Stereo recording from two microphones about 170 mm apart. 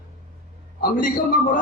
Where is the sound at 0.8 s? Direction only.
55° left (ahead or behind).